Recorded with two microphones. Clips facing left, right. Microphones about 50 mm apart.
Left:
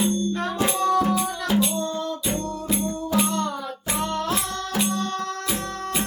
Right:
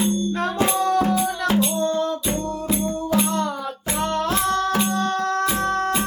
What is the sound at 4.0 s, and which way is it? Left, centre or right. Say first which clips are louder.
Music: right 5 dB; right.